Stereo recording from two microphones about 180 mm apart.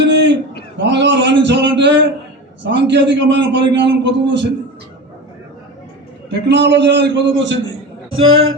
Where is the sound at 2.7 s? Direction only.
75° right (ahead or behind).